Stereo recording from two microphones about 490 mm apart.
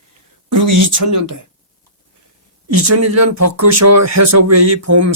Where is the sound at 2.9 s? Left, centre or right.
Right.